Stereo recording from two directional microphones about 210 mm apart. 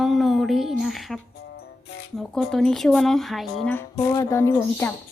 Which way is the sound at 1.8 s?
55° left (ahead or behind).